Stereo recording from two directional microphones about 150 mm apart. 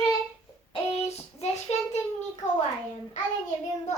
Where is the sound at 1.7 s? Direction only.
45° left (ahead or behind).